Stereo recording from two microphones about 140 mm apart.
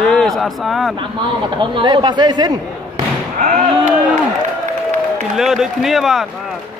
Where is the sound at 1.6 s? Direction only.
35° right (ahead or behind).